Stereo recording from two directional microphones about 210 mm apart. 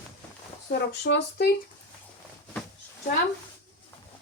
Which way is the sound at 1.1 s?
55° left (ahead or behind).